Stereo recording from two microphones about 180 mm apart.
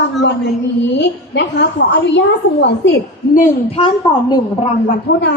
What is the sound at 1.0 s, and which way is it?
A woman's voice, 80° left.